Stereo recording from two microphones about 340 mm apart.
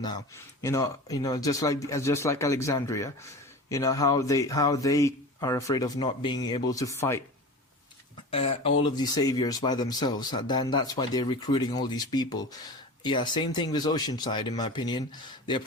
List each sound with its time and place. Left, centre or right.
0.6 s speech: centre
8.3 s speech: centre